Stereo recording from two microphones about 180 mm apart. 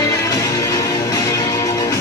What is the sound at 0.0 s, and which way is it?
Music, 20° left (ahead or behind).